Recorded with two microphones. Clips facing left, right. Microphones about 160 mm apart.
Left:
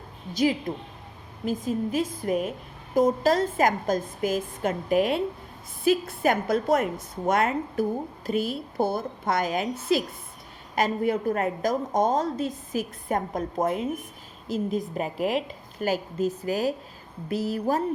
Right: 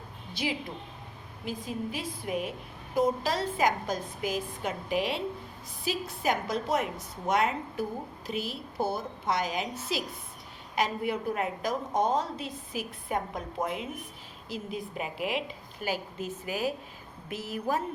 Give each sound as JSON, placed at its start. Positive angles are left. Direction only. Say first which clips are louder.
{"t": 0.7, "sound": "a woman's voice", "louder": "left 8 dB", "side_deg": 45}